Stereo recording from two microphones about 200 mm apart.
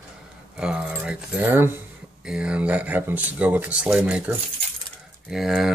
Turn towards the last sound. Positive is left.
turn(degrees=-5)  # may be behind; listen again after turning